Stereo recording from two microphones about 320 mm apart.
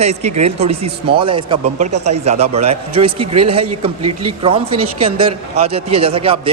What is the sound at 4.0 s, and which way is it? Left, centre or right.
Speech, right.